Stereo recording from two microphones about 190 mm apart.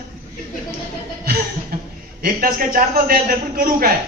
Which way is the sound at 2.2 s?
50° right (ahead or behind).